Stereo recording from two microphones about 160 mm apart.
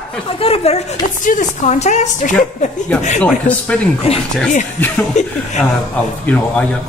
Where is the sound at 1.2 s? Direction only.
50° left (ahead or behind).